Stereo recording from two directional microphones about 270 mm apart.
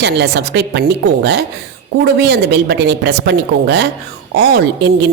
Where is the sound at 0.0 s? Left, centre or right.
Right.